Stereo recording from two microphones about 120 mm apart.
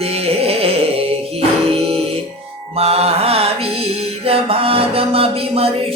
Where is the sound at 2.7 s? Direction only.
55° right (ahead or behind).